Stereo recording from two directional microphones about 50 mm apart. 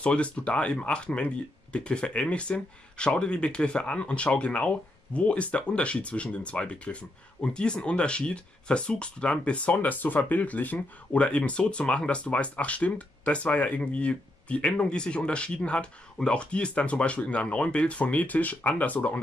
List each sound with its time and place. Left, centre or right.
0.0 s speech: left
11.1 s speech: left